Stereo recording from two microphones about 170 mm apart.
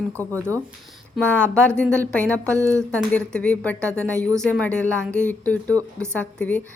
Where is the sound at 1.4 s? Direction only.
5° left (ahead or behind).